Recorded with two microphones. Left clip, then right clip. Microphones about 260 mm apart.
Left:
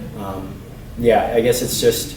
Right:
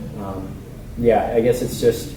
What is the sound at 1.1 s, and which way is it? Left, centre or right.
Speech, centre.